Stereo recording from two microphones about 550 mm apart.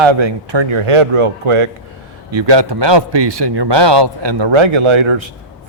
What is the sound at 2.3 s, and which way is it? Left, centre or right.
Speech, right.